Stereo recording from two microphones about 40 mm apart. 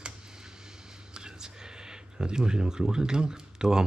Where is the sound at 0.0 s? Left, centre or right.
Centre.